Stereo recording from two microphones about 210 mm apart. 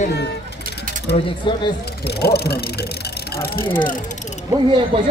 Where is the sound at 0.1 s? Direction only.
50° left (ahead or behind).